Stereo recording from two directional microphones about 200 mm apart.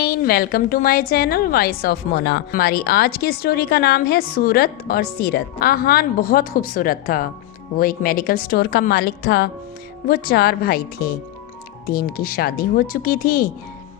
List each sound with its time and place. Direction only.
0.0 s a woman's voice: 50° left (ahead or behind)